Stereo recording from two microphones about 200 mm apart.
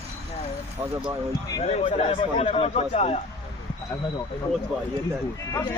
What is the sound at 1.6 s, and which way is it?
Speech, 30° left (ahead or behind).